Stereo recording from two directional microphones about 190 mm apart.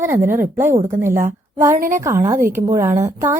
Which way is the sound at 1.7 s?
45° right (ahead or behind).